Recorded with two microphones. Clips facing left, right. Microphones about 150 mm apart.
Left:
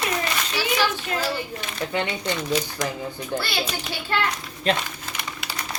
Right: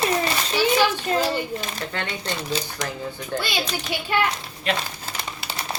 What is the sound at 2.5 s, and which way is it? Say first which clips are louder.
Speech: left 4 dB; 30° right (ahead or behind).